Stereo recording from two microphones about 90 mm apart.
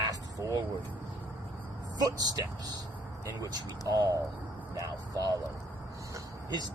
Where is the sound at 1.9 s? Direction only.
50° right (ahead or behind).